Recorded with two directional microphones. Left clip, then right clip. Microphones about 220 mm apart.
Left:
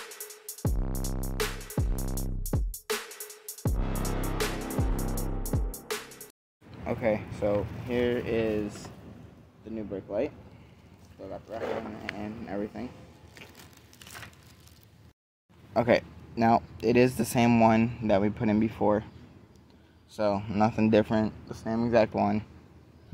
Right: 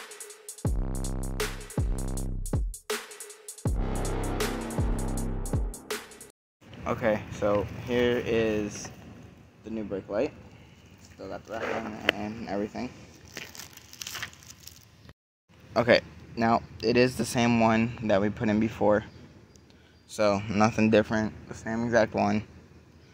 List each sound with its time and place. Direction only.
0.1 s music: centre (ahead or behind)
6.8 s speech: centre (ahead or behind)
7.5 s speech: 15° right (ahead or behind)
9.7 s speech: 30° right (ahead or behind)
15.7 s speech: 10° left (ahead or behind)
16.3 s speech: 20° left (ahead or behind)
20.1 s speech: centre (ahead or behind)
21.1 s speech: 25° left (ahead or behind)
22.1 s speech: 5° left (ahead or behind)